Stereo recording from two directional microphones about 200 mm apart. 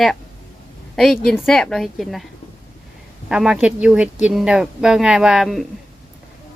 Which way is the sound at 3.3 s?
5° right (ahead or behind).